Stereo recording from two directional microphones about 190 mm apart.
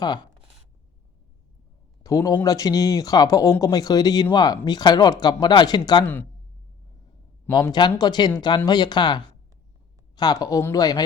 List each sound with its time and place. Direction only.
2.0 s speech: 20° left (ahead or behind)
7.5 s speech: 20° left (ahead or behind)